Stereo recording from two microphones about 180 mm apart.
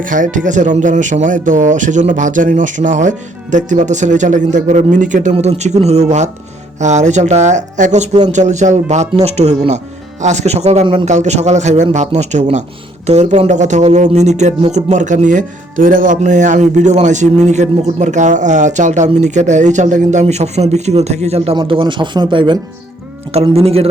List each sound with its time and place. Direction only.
0.0 s speech: 45° right (ahead or behind)